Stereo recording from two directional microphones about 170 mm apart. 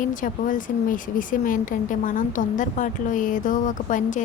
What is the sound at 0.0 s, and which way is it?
Speech, 50° left (ahead or behind).